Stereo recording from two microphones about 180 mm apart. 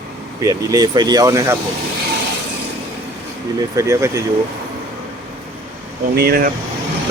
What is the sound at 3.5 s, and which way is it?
Speech, 20° right (ahead or behind).